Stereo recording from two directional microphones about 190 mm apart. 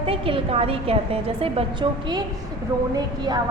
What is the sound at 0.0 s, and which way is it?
A woman's voice, 30° right (ahead or behind).